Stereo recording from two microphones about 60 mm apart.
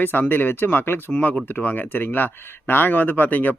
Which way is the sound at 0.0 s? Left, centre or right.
Left.